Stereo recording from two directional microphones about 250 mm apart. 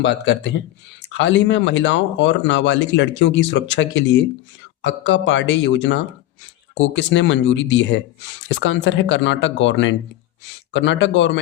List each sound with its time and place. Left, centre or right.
0.0 s speech: left